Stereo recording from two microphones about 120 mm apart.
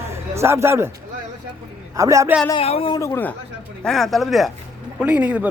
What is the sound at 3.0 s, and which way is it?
Speech, 20° left (ahead or behind).